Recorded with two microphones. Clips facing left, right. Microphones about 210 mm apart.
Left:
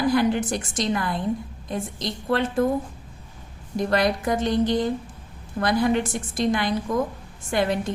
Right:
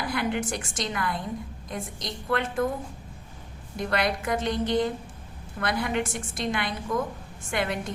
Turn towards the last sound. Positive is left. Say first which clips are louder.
# left 5 dB
turn(degrees=35)  # may be behind; listen again after turning